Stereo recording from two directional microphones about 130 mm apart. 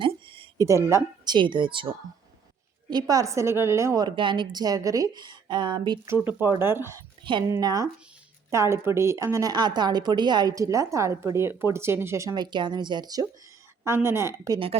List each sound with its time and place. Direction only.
0.6 s a woman's voice: 20° right (ahead or behind)
1.2 s a woman's voice: 35° right (ahead or behind)
2.9 s a woman's voice: 30° right (ahead or behind)
6.1 s a woman's voice: 15° right (ahead or behind)
13.8 s a woman's voice: 20° right (ahead or behind)